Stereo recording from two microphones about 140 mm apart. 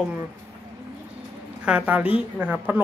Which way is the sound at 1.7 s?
10° right (ahead or behind).